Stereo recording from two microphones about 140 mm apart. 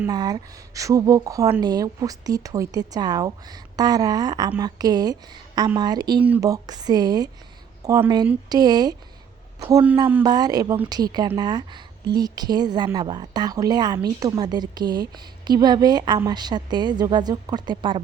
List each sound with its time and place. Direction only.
0.1 s a woman's voice: 30° right (ahead or behind)